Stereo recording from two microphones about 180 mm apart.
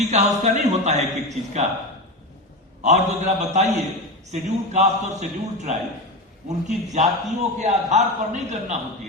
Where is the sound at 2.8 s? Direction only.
40° right (ahead or behind).